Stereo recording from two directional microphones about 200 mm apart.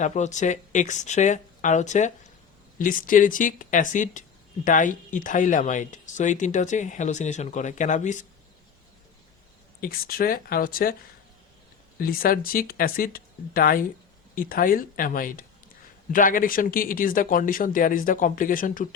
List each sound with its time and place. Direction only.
0.0 s speech: 35° left (ahead or behind)
9.8 s speech: 45° left (ahead or behind)
11.9 s speech: 45° left (ahead or behind)